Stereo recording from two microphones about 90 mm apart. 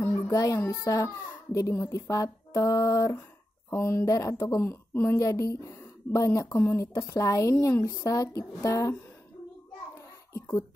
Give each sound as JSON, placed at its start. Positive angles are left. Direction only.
{"t": 0.0, "sound": "music", "side_deg": 30}
{"t": 0.8, "sound": "speech", "side_deg": 35}